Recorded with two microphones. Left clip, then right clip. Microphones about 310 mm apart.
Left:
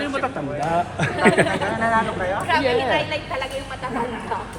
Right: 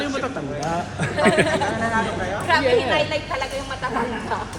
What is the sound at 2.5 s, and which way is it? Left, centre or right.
A woman's voice, right.